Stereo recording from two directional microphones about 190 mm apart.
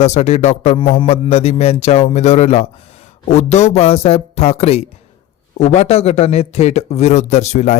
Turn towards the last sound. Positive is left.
turn(degrees=35)  # may be behind; listen again after turning